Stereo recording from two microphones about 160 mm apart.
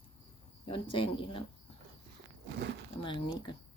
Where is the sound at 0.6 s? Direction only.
35° left (ahead or behind).